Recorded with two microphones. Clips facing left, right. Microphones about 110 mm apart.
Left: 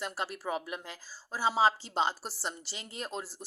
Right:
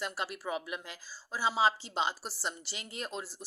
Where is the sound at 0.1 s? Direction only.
40° left (ahead or behind).